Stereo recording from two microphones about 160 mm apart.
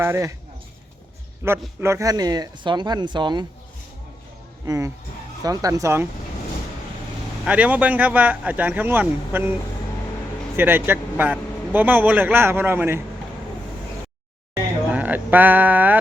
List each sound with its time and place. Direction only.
0.0 s a man's voice: 15° right (ahead or behind)
1.4 s a man's voice: 15° right (ahead or behind)
4.6 s speech: 20° right (ahead or behind)
7.4 s a man's voice: 10° right (ahead or behind)
10.6 s a man's voice: 15° right (ahead or behind)
14.8 s a sound: 10° right (ahead or behind)